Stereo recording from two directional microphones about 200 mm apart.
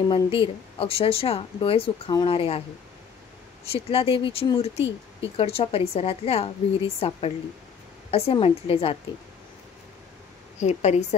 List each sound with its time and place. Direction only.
0.1 s speech: 25° left (ahead or behind)
3.7 s speech: 30° left (ahead or behind)
10.6 s a woman's voice: 35° left (ahead or behind)